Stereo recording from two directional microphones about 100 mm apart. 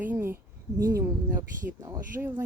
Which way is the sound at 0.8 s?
35° right (ahead or behind).